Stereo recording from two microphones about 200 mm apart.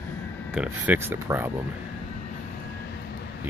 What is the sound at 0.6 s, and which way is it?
Speech, 10° right (ahead or behind).